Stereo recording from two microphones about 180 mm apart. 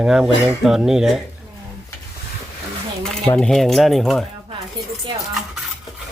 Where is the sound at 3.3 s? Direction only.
Centre (ahead or behind).